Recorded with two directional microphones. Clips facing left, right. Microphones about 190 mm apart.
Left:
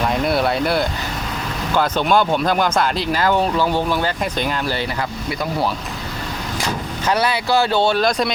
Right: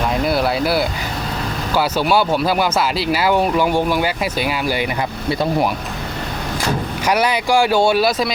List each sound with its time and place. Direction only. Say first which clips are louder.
0.1 s speech: even; centre (ahead or behind)
5.3 s speech: right 6 dB; 30° right (ahead or behind)
7.0 s speech: right 1 dB; 15° right (ahead or behind)